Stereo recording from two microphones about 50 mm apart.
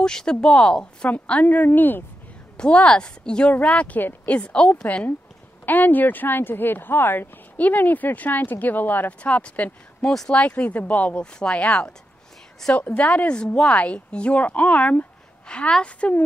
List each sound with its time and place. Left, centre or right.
0.0 s speech: centre
1.7 s speech: left
2.5 s speech: left
5.7 s speech: left
7.5 s speech: left
9.2 s speech: left
10.6 s speech: left